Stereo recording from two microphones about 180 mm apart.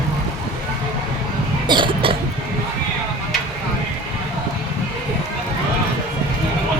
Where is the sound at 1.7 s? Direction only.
25° right (ahead or behind).